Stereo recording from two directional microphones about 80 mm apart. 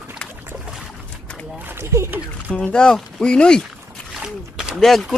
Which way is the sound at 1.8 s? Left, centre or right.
Right.